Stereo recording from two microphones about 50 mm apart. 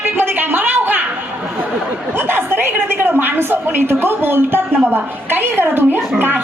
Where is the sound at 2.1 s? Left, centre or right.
Right.